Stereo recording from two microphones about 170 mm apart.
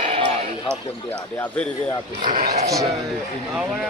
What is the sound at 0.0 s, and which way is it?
Basketball bounce, 35° right (ahead or behind).